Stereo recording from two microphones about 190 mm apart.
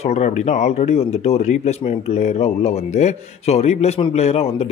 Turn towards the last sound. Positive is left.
turn(degrees=35)  # may be behind; listen again after turning